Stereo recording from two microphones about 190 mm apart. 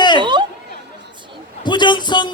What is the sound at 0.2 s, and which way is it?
Chatter, 25° right (ahead or behind).